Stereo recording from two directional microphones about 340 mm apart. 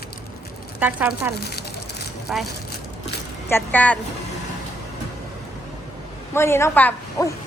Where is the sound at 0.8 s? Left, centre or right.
Centre.